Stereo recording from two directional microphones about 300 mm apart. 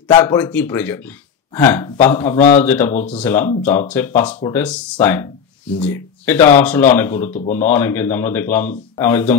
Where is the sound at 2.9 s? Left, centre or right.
Left.